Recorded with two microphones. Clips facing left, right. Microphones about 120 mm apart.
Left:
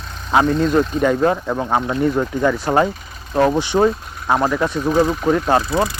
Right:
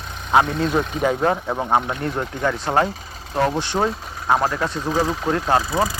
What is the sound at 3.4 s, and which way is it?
Speech, 15° left (ahead or behind).